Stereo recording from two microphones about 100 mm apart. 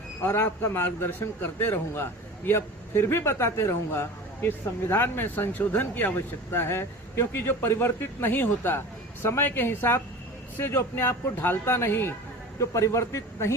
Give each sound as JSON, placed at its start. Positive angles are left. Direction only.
{"t": 0.2, "sound": "a man's voice", "side_deg": 20}